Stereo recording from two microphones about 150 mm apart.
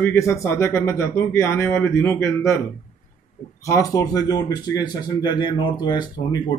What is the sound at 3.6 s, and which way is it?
Speech, 20° left (ahead or behind).